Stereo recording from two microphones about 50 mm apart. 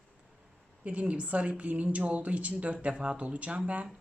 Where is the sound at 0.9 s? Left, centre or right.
Right.